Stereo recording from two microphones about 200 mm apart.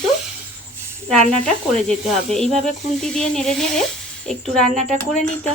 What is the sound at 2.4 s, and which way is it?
Speech, 30° right (ahead or behind).